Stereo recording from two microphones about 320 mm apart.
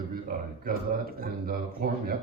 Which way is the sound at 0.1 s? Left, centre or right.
Right.